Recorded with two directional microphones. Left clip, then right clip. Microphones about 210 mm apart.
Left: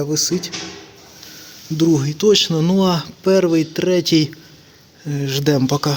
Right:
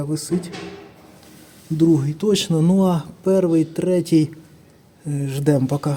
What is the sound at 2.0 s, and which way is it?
A man's voice, centre (ahead or behind).